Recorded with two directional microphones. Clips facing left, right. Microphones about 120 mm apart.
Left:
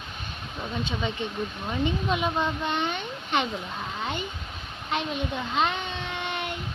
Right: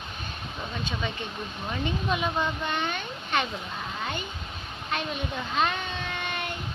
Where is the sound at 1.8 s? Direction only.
20° left (ahead or behind).